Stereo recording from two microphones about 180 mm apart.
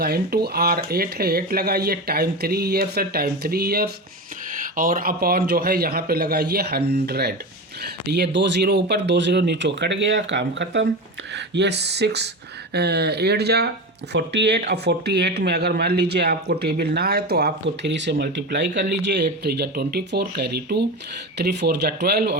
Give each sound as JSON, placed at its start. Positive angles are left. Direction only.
{"t": 0.0, "sound": "speech", "side_deg": -60}